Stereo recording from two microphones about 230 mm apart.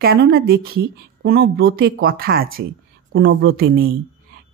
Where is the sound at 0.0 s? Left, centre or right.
Right.